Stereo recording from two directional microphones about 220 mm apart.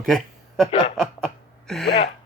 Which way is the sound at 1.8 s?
50° left (ahead or behind).